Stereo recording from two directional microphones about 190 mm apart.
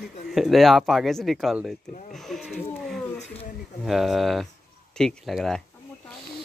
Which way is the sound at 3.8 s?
Centre (ahead or behind).